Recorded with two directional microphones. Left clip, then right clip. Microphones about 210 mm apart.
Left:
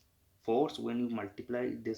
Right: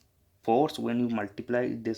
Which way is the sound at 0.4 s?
45° right (ahead or behind).